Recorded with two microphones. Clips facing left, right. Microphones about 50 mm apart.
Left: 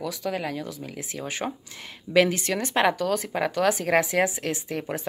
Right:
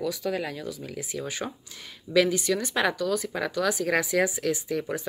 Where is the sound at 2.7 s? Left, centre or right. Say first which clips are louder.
Left 6 dB; left.